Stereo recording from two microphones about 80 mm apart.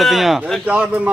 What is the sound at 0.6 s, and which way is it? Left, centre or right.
Speech, centre.